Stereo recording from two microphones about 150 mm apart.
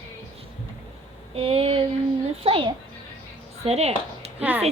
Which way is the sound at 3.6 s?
45° right (ahead or behind).